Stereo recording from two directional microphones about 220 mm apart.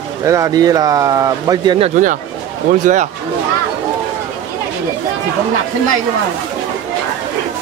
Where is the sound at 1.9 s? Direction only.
35° right (ahead or behind).